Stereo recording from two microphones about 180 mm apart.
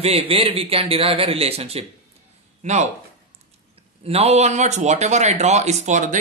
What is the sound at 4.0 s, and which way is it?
A man's voice, 35° right (ahead or behind).